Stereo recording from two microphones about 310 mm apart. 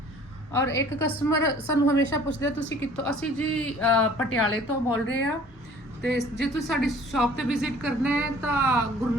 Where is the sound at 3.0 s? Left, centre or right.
Centre.